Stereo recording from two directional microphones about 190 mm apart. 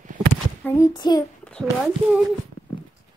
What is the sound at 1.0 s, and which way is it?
Child singing, 20° left (ahead or behind).